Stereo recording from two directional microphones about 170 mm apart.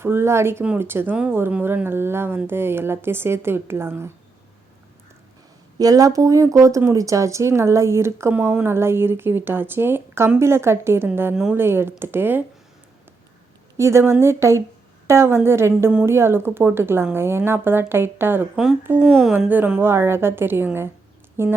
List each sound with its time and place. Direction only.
0.0 s speech: 15° right (ahead or behind)
5.8 s speech: 20° right (ahead or behind)
13.7 s speech: 15° right (ahead or behind)